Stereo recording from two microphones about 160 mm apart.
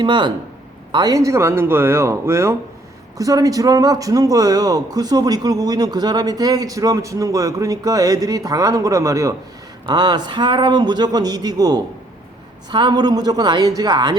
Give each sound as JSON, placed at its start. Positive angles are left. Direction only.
{"t": 0.0, "sound": "a man's voice", "side_deg": -30}